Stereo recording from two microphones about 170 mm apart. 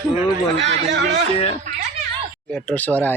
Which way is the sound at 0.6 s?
85° right.